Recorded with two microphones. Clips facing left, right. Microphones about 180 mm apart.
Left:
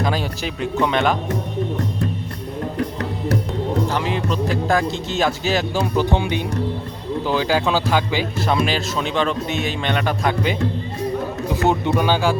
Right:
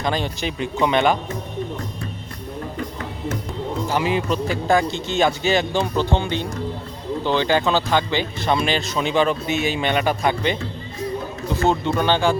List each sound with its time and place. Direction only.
0.0 s speech: 5° left (ahead or behind)
2.7 s music: 65° left (ahead or behind)
3.8 s speech: 5° right (ahead or behind)
11.4 s speech: 15° left (ahead or behind)